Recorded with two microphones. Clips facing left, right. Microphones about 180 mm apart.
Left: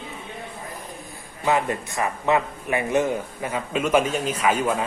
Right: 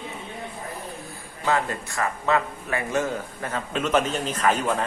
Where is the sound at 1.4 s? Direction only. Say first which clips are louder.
Left 2 dB; 20° left (ahead or behind).